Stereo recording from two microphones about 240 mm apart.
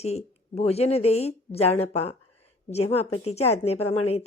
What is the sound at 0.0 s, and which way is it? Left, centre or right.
A woman's voice, left.